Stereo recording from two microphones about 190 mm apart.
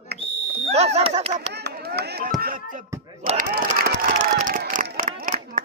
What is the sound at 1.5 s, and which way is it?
Chop, 60° right (ahead or behind).